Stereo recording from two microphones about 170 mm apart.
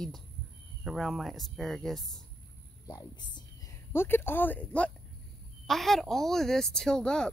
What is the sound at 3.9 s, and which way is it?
Speech, 15° left (ahead or behind).